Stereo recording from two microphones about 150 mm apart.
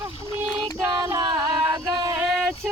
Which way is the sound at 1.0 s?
25° right (ahead or behind).